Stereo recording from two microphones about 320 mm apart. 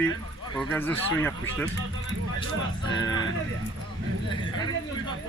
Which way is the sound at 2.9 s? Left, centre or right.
Centre.